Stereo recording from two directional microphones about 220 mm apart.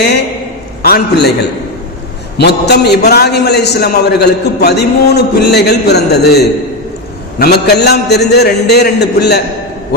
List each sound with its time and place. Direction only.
0.8 s a man's voice: 45° left (ahead or behind)
2.4 s a man's voice: 50° left (ahead or behind)